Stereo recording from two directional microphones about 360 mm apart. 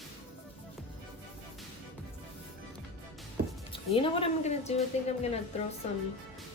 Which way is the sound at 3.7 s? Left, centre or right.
Centre.